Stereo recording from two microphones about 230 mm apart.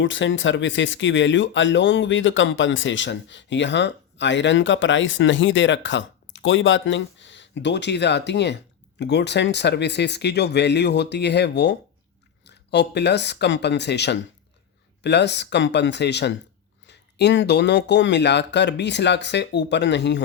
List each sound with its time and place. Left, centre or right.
0.0 s speech: left